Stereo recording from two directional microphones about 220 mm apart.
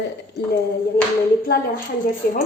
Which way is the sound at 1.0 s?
45° left (ahead or behind).